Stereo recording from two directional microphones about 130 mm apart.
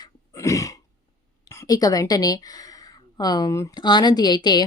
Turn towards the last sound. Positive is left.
turn(degrees=35)  # may be behind; listen again after turning